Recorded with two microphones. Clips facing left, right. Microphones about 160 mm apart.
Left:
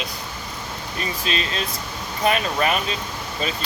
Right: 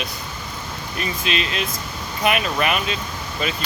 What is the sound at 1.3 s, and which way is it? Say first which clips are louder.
Speech: right 2 dB; 35° left (ahead or behind).